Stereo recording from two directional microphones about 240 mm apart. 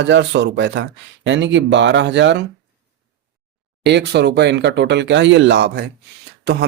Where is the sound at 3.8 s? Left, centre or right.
Right.